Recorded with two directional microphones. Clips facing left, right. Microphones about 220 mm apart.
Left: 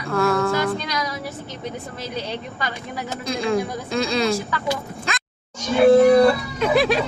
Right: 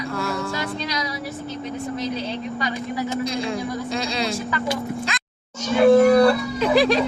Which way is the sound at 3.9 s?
50° left (ahead or behind).